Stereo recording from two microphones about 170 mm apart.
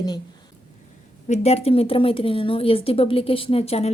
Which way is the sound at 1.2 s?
40° left (ahead or behind).